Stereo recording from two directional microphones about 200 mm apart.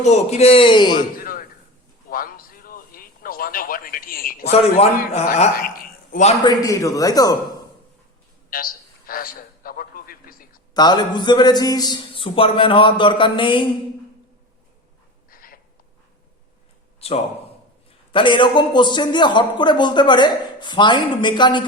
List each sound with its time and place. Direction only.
0.0 s a man's voice: 35° left (ahead or behind)
1.2 s a sound: 45° left (ahead or behind)
4.5 s a man's voice: 30° left (ahead or behind)
5.5 s a sound: 45° left (ahead or behind)
6.4 s a man's voice: 20° left (ahead or behind)
8.4 s a sound: 45° left (ahead or behind)
10.8 s a man's voice: 20° left (ahead or behind)
15.3 s cat: 45° left (ahead or behind)
17.0 s a man's voice: 30° left (ahead or behind)